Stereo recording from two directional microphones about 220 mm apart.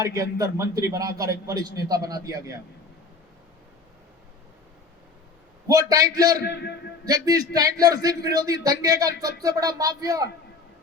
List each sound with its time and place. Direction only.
0.0 s a man's voice: 15° right (ahead or behind)
5.6 s a man's voice: 15° right (ahead or behind)
6.4 s a man's voice: 50° left (ahead or behind)
7.1 s a man's voice: 15° right (ahead or behind)